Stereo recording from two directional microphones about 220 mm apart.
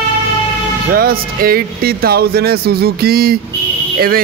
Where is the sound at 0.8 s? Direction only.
40° right (ahead or behind).